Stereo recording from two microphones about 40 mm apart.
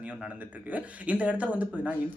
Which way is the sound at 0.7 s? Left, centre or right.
Right.